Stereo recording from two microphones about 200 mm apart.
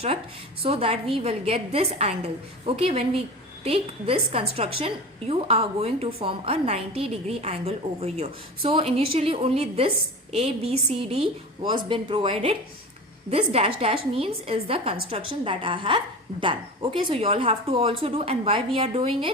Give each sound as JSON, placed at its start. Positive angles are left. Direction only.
{"t": 0.6, "sound": "a woman's voice", "side_deg": -30}